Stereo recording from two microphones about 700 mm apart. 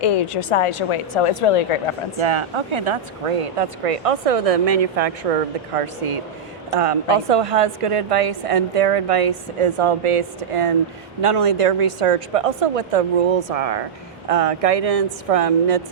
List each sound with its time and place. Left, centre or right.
0.2 s speech: left
2.1 s speech: right
5.7 s speech: right